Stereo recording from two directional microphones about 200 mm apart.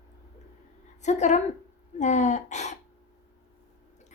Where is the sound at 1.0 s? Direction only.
35° left (ahead or behind).